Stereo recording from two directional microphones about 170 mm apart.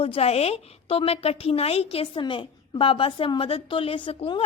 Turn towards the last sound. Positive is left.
turn(degrees=30)  # may be behind; listen again after turning